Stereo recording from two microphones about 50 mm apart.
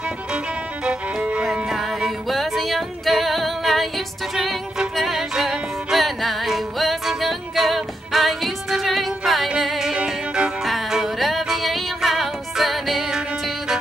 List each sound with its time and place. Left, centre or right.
0.8 s music: centre
4.9 s music: centre
10.0 s music: centre
10.6 s music: centre